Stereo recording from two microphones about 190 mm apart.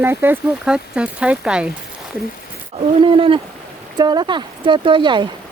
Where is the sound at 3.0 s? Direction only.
25° right (ahead or behind).